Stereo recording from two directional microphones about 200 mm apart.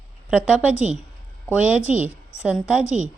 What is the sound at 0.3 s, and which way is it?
A woman's voice, 5° right (ahead or behind).